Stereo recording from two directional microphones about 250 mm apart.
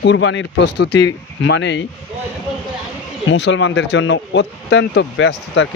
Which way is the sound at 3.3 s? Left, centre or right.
Left.